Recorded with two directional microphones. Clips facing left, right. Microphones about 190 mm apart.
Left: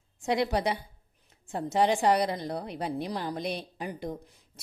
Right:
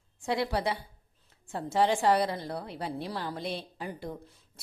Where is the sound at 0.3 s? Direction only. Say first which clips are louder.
Left 2 dB; 20° left (ahead or behind).